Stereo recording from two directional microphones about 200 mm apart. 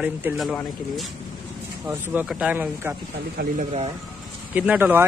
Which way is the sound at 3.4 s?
40° right (ahead or behind).